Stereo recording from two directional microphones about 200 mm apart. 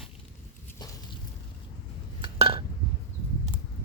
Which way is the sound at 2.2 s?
25° right (ahead or behind).